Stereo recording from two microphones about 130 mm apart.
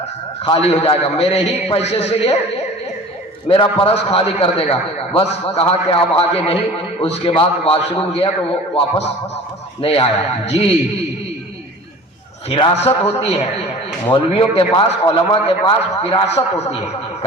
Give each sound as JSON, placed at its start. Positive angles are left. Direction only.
{"t": 0.4, "sound": "a man's voice", "side_deg": 50}
{"t": 3.4, "sound": "a man's voice", "side_deg": 40}
{"t": 9.8, "sound": "a man's voice", "side_deg": 50}
{"t": 12.5, "sound": "a man's voice", "side_deg": 50}
{"t": 14.1, "sound": "a man's voice", "side_deg": 45}